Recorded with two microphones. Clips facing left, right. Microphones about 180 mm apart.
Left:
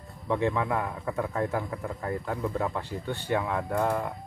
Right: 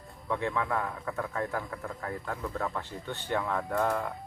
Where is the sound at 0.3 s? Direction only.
15° left (ahead or behind).